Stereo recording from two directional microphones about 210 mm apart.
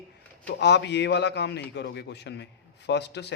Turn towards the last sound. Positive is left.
turn(degrees=55)  # may be behind; listen again after turning